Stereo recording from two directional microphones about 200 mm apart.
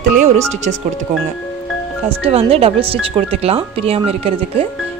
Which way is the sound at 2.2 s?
30° right (ahead or behind).